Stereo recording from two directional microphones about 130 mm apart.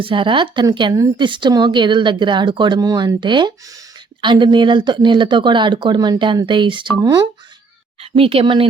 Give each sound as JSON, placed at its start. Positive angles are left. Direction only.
{"t": 0.0, "sound": "speech", "side_deg": -40}
{"t": 8.1, "sound": "speech", "side_deg": -45}